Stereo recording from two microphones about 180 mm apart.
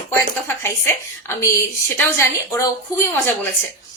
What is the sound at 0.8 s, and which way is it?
A woman's voice, 15° left (ahead or behind).